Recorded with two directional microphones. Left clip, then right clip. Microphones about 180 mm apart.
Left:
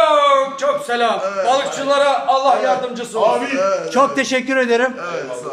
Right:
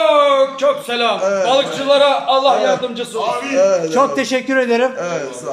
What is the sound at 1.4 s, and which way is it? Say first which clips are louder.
A man's voice: even; 5° right (ahead or behind).